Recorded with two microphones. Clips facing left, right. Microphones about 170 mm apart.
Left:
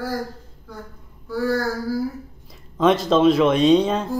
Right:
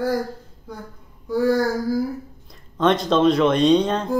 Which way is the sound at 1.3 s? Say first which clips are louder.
Right 4 dB; 15° right (ahead or behind).